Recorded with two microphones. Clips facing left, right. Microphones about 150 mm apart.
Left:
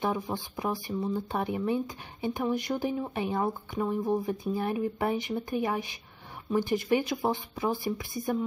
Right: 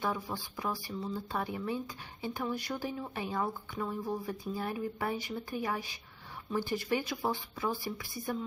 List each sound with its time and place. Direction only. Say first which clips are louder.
0.0 s speech: left 5 dB; 20° left (ahead or behind)